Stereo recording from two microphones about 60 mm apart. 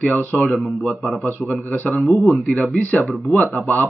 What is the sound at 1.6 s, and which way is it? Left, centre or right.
Speech, left.